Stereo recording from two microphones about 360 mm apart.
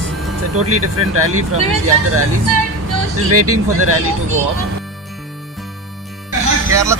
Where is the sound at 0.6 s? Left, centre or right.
Right.